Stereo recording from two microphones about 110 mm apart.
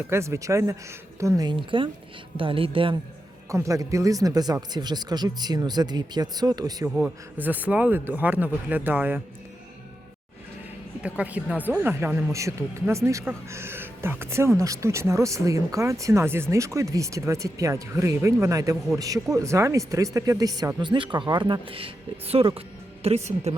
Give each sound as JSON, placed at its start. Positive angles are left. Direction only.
{"t": 0.1, "sound": "speech", "side_deg": -25}
{"t": 1.5, "sound": "speech", "side_deg": -50}
{"t": 3.5, "sound": "speech", "side_deg": -30}
{"t": 7.3, "sound": "speech", "side_deg": -15}
{"t": 11.0, "sound": "speech", "side_deg": -10}
{"t": 23.0, "sound": "a woman's voice", "side_deg": -80}